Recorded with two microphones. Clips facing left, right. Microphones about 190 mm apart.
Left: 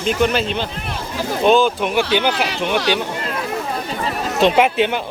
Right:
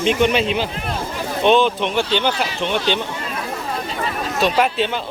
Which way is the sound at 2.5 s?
75° left (ahead or behind).